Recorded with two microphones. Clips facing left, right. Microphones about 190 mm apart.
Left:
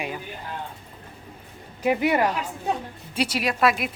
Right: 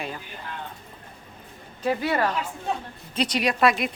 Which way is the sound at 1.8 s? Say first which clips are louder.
Left 3 dB; 15° left (ahead or behind).